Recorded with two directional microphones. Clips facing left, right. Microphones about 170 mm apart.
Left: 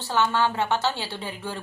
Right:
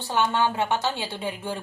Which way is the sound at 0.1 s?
15° right (ahead or behind).